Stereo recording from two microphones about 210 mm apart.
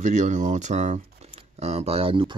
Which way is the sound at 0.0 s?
35° right (ahead or behind).